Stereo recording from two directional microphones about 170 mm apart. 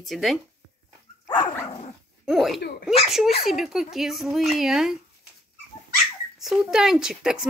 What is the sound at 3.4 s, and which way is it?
Speech, centre (ahead or behind).